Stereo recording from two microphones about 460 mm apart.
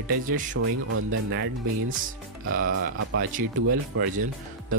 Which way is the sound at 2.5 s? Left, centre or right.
Right.